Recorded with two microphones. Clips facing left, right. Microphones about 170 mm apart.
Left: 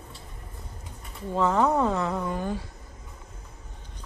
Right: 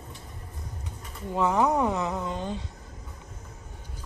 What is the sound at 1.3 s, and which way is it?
Speech, 15° right (ahead or behind).